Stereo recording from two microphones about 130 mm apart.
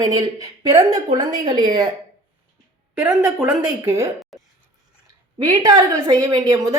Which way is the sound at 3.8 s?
20° right (ahead or behind).